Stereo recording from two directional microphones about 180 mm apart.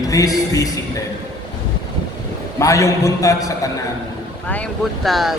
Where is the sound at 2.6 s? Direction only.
15° left (ahead or behind).